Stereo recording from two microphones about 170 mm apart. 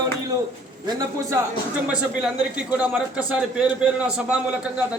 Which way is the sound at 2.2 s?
5° right (ahead or behind).